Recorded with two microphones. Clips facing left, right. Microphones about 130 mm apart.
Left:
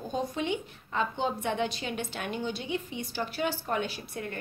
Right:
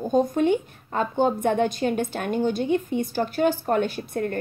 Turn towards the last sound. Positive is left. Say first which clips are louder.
# right 10 dB
turn(degrees=-50)  # may be behind; listen again after turning